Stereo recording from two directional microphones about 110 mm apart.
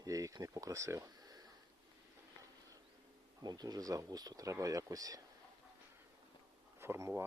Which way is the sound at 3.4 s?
35° right (ahead or behind).